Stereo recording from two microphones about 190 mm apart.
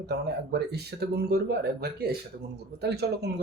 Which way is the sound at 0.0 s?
60° right (ahead or behind).